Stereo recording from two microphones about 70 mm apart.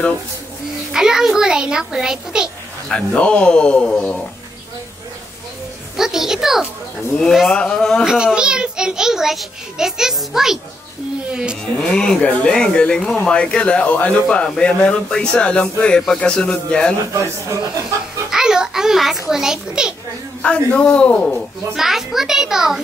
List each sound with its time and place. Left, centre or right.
0.9 s a child's voice: centre
3.2 s speech: centre
5.9 s a child's voice: centre
7.5 s speech: centre
8.0 s a child's voice: centre
11.8 s speech: centre
17.1 s speech: right
18.3 s a child's voice: centre
20.4 s speech: centre
21.7 s a child's voice: centre